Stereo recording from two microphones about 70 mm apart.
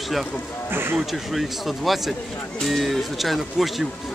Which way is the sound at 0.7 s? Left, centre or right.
Right.